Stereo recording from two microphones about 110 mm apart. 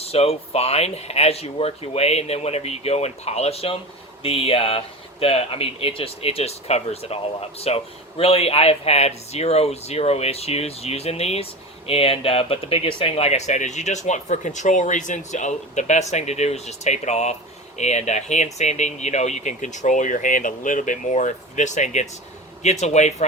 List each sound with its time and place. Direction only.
0.0 s speech: 65° left (ahead or behind); by 20.1 s 90° left
21.1 s speech: 90° left